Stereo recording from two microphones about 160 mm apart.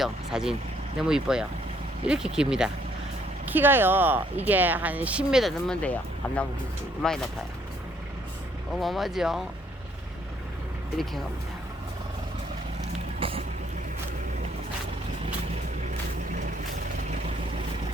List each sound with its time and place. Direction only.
0.0 s speech: 5° right (ahead or behind)
8.7 s speech: centre (ahead or behind)
13.1 s vehicle: 35° right (ahead or behind)